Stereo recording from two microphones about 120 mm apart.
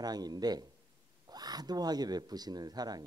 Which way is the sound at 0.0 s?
35° right (ahead or behind).